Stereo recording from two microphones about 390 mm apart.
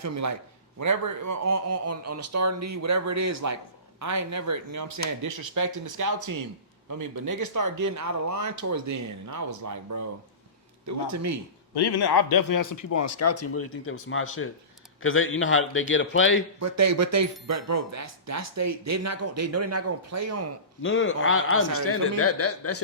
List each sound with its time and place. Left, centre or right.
0.0 s speech: right
11.7 s a man's voice: left
16.6 s speech: right
20.8 s speech: left